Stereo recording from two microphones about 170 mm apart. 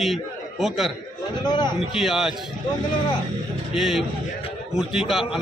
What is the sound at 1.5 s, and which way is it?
Speech, 25° left (ahead or behind).